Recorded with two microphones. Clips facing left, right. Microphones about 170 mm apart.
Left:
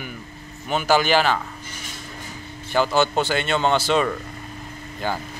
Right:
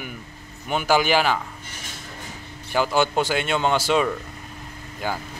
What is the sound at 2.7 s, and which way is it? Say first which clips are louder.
Speech: left 1 dB; 10° right (ahead or behind).